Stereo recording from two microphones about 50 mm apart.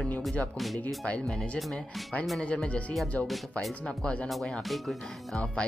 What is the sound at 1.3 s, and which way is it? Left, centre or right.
Speech, left.